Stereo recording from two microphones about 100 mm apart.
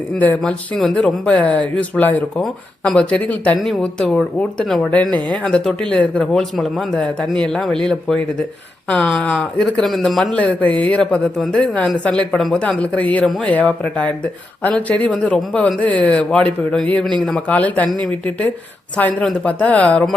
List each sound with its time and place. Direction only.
0.2 s speech: 15° left (ahead or behind)
0.8 s speech: 5° left (ahead or behind)
10.3 s speech: 15° left (ahead or behind)
17.5 s speech: 15° left (ahead or behind)
19.2 s speech: 10° left (ahead or behind)